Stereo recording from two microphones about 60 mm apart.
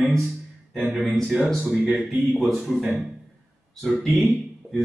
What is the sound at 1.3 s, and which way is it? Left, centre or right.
Speech, right.